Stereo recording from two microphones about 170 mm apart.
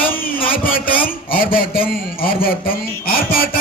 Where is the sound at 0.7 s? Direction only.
55° left (ahead or behind).